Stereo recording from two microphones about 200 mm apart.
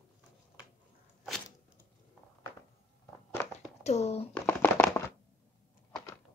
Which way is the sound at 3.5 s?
35° left (ahead or behind).